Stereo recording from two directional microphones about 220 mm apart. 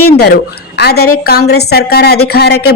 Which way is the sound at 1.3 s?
45° left (ahead or behind).